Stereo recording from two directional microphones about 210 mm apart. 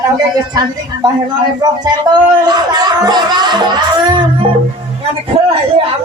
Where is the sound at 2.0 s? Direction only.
20° right (ahead or behind).